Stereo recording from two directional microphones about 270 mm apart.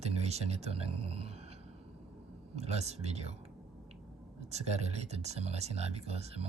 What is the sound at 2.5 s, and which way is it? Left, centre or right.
Speech, right.